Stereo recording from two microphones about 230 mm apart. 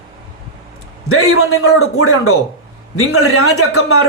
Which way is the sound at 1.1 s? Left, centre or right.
Left.